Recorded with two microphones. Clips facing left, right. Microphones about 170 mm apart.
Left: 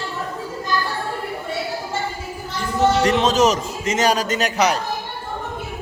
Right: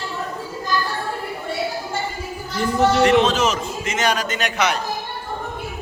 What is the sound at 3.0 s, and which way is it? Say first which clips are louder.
A man's voice: even; 40° left (ahead or behind).